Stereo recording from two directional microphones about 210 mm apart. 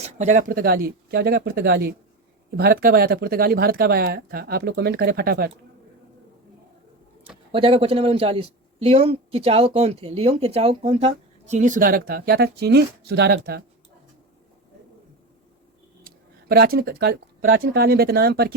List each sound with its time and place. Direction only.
0.0 s speech: 35° right (ahead or behind)
7.5 s speech: 25° right (ahead or behind); by 13.6 s 50° right (ahead or behind)
16.0 s a sound: 45° right (ahead or behind)
17.4 s speech: 55° right (ahead or behind)